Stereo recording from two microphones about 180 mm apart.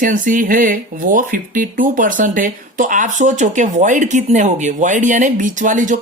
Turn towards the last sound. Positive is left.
turn(degrees=-45)  # may be behind; listen again after turning